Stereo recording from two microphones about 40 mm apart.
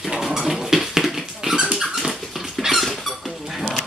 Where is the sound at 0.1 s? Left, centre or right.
Centre.